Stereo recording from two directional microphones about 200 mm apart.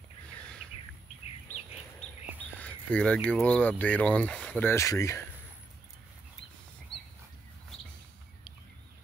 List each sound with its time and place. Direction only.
2.6 s speech: 5° left (ahead or behind)